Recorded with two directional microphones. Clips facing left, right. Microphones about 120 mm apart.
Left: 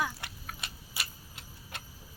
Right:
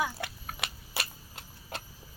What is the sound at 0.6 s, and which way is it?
Keys jangling, 70° right (ahead or behind).